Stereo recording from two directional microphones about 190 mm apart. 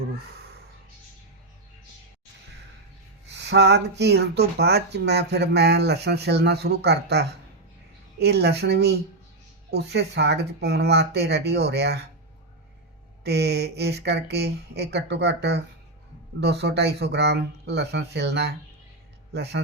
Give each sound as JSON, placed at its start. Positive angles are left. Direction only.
{"t": 3.2, "sound": "speech", "side_deg": -65}
{"t": 13.2, "sound": "speech", "side_deg": -60}